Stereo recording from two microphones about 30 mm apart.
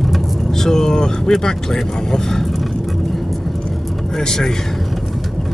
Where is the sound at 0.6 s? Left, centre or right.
Centre.